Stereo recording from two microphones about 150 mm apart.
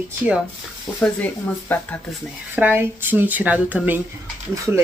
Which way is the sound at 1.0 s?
10° left (ahead or behind).